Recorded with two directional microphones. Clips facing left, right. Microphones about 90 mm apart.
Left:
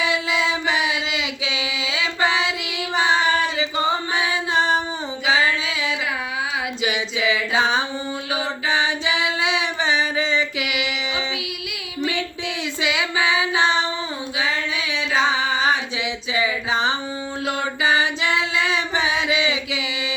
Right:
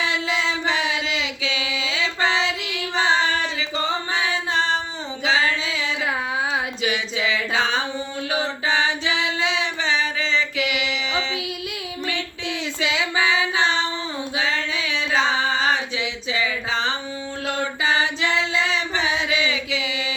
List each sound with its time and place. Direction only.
0.0 s a sound: 15° left (ahead or behind)
1.9 s singing: 15° left (ahead or behind)
2.9 s female singing: 15° left (ahead or behind)
3.8 s singing: 15° left (ahead or behind)
6.8 s a sound: 15° left (ahead or behind)
8.7 s singing: 15° left (ahead or behind)
12.8 s female singing: 15° left (ahead or behind)
15.1 s carnatic music: 15° left (ahead or behind)
16.3 s a sound: 15° left (ahead or behind)
17.4 s singing: 15° left (ahead or behind)